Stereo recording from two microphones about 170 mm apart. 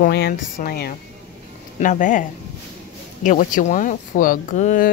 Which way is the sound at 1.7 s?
50° left (ahead or behind).